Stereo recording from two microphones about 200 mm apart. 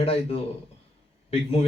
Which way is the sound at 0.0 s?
30° left (ahead or behind).